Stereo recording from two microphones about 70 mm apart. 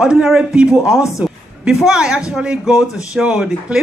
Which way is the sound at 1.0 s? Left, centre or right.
Centre.